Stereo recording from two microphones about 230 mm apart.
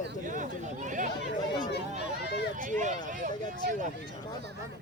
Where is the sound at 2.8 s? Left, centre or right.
Right.